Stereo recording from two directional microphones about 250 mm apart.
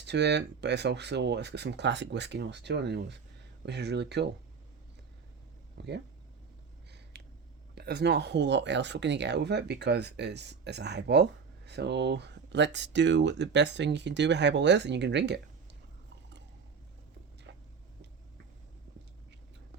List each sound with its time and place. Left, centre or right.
0.0 s speech: right
5.7 s speech: right
7.1 s a sound: right
7.8 s speech: right